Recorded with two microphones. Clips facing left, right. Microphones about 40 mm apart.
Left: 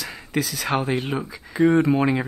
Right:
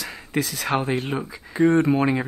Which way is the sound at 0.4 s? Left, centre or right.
Right.